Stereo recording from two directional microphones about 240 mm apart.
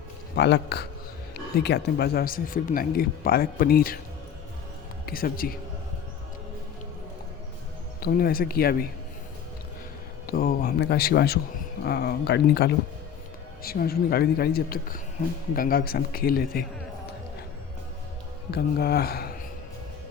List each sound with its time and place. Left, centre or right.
0.3 s speech: left
5.0 s a man's voice: left
8.0 s speech: left
10.2 s speech: left
18.5 s speech: left